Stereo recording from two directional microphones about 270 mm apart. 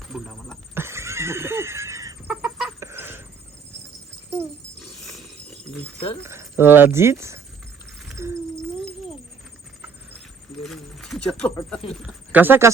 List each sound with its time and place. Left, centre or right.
0.1 s speech: centre
0.8 s chicken: centre
4.4 s a sound: centre
6.2 s speech: centre
10.6 s a sound: centre
11.9 s speech: centre